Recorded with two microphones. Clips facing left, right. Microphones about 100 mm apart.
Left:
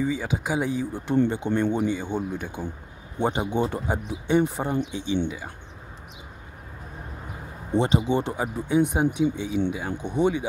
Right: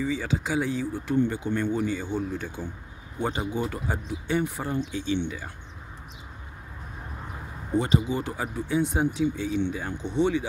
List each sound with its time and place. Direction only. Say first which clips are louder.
0.0 s speech: left 1 dB; 15° left (ahead or behind)
7.7 s speech: left 3 dB; 25° left (ahead or behind)